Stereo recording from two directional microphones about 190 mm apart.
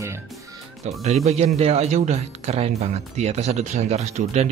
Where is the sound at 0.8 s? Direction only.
35° right (ahead or behind).